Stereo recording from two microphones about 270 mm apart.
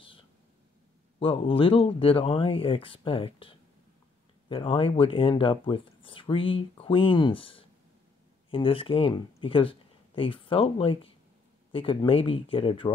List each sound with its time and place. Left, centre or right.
1.2 s speech: centre